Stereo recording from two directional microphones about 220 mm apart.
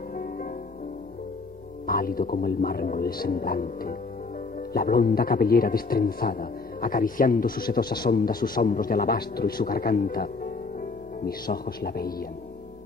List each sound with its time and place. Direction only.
0.1 s music: 40° left (ahead or behind)
1.9 s a man's voice: 40° left (ahead or behind)